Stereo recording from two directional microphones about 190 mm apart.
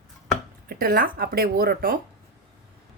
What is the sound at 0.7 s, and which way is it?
Speech, 50° right (ahead or behind).